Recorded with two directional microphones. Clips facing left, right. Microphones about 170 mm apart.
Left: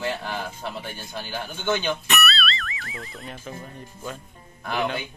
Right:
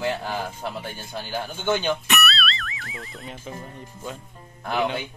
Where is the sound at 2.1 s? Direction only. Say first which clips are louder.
Even; centre (ahead or behind).